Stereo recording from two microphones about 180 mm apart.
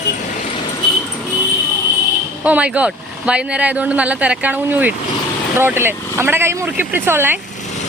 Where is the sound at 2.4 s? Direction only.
5° right (ahead or behind).